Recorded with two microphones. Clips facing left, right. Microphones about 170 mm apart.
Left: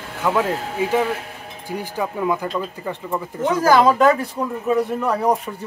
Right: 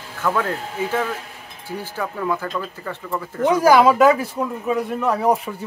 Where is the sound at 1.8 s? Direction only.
15° left (ahead or behind).